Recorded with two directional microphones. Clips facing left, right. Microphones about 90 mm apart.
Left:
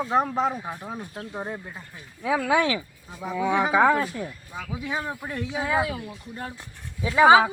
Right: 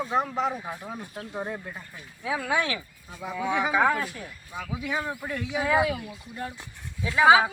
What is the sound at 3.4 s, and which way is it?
Speech, 30° left (ahead or behind).